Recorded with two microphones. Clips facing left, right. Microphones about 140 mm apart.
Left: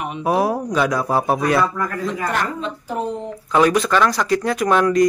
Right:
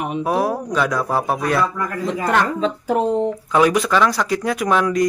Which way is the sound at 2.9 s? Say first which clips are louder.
Right 4 dB; 85° right.